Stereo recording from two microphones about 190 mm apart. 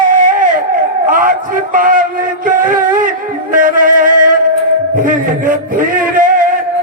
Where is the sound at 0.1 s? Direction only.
45° right (ahead or behind).